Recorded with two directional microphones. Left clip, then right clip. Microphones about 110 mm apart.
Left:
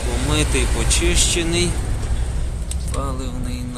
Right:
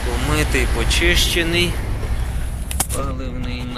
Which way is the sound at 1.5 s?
50° left (ahead or behind).